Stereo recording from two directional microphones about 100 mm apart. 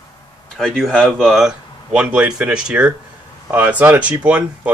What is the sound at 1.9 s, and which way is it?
Speech, 10° right (ahead or behind).